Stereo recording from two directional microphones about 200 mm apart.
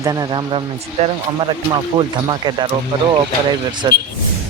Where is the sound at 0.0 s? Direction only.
20° right (ahead or behind).